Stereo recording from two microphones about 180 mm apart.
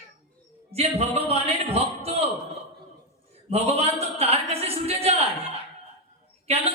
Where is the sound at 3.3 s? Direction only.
35° right (ahead or behind).